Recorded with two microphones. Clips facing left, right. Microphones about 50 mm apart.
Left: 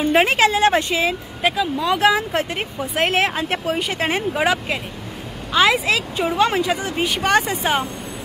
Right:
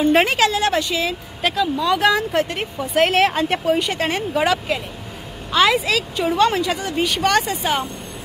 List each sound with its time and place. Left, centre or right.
0.3 s speech: left
1.4 s speech: centre
5.9 s speech: centre